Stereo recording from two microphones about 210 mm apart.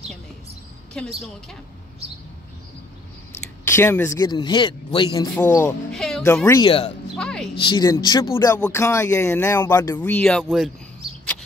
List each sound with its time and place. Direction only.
1.0 s a woman's voice: 5° left (ahead or behind)
3.6 s a man's voice: 10° left (ahead or behind)
5.3 s speech: 10° left (ahead or behind)
5.9 s music: centre (ahead or behind)
6.2 s speech: 15° left (ahead or behind)
7.2 s a woman's voice: centre (ahead or behind)
7.5 s a man's voice: 20° left (ahead or behind); by 10.7 s centre (ahead or behind)